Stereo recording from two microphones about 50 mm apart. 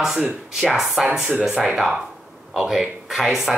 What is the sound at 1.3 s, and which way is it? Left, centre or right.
Speech, right.